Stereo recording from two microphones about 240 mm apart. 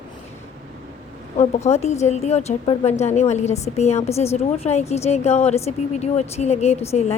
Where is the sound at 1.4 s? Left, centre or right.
Left.